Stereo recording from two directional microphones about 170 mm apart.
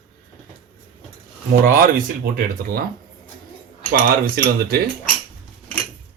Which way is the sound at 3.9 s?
55° right (ahead or behind).